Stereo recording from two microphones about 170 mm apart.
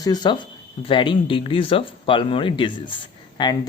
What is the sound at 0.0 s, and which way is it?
Speech, 25° left (ahead or behind).